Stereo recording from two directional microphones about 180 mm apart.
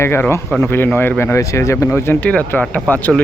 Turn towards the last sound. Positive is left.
turn(degrees=10)  # may be behind; listen again after turning